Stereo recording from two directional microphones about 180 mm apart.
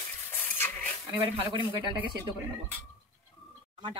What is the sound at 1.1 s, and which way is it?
Speech, 25° right (ahead or behind).